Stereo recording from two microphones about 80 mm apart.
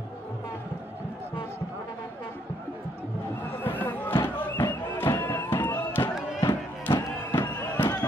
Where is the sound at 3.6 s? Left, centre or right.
Left.